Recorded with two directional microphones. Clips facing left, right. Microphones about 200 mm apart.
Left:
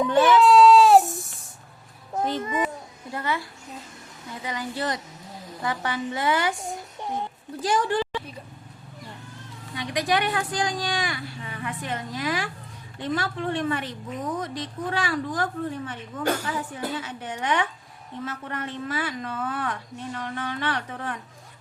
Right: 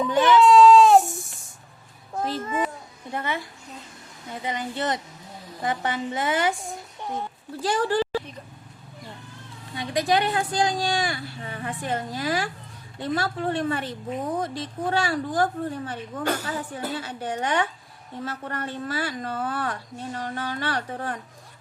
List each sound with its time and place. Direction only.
0.2 s baby cry: centre (ahead or behind)
2.4 s a child's voice: 15° left (ahead or behind)
3.1 s a woman's voice: 20° right (ahead or behind)
4.4 s a woman's voice: 25° right (ahead or behind)
7.6 s speech: 30° right (ahead or behind)
9.7 s a woman's voice: 30° right (ahead or behind)